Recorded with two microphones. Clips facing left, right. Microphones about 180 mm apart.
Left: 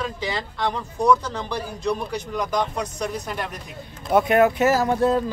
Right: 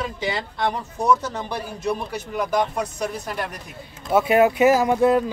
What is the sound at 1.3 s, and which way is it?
Speech, 5° right (ahead or behind).